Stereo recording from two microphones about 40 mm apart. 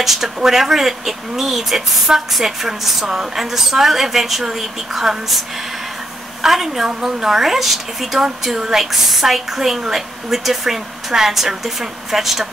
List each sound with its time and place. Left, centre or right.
0.0 s speech: centre
6.4 s speech: centre